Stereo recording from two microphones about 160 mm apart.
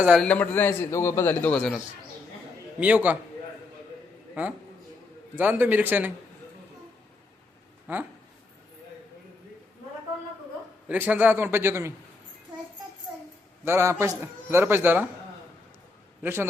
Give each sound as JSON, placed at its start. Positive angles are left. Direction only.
{"t": 0.0, "sound": "a man's voice", "side_deg": -5}
{"t": 0.3, "sound": "a man's voice", "side_deg": 10}
{"t": 2.8, "sound": "a man's voice", "side_deg": -10}
{"t": 5.3, "sound": "a man's voice", "side_deg": -10}
{"t": 10.8, "sound": "a man's voice", "side_deg": -10}
{"t": 13.7, "sound": "a man's voice", "side_deg": -15}
{"t": 16.2, "sound": "a man's voice", "side_deg": -15}